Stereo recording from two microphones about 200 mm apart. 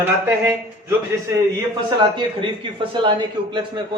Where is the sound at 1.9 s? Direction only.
25° right (ahead or behind).